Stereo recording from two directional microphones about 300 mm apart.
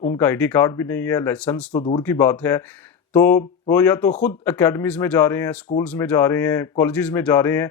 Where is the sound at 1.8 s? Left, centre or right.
Centre.